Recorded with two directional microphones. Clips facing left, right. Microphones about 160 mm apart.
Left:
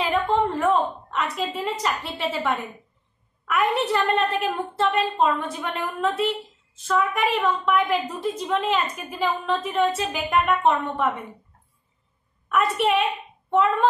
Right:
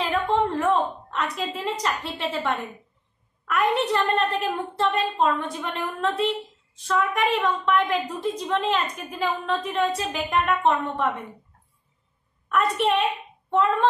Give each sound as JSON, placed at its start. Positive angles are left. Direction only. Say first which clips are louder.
{"t": 0.0, "sound": "a sound", "louder": "left 1 dB", "side_deg": 0}
{"t": 3.4, "sound": "a woman's voice", "louder": "even", "side_deg": 5}
{"t": 12.4, "sound": "a woman's voice", "louder": "left 1 dB", "side_deg": 5}